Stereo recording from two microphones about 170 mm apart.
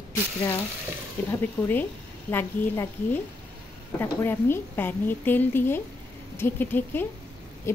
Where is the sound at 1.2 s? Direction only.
10° left (ahead or behind).